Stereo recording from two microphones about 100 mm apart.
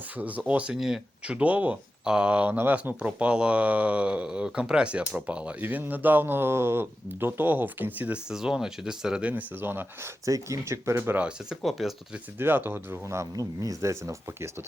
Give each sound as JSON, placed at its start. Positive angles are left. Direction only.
{"t": 0.2, "sound": "speech", "side_deg": -15}
{"t": 9.3, "sound": "speech", "side_deg": -20}
{"t": 10.2, "sound": "speech", "side_deg": -35}
{"t": 11.2, "sound": "speech", "side_deg": -10}
{"t": 12.4, "sound": "speech", "side_deg": -20}